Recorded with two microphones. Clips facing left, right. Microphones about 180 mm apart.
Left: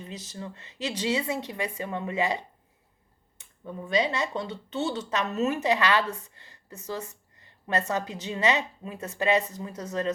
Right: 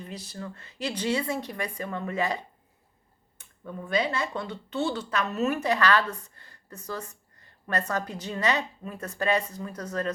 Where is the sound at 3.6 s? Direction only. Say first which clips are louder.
Left 1 dB; 15° left (ahead or behind).